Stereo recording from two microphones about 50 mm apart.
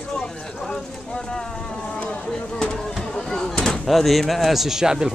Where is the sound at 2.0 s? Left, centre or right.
Left.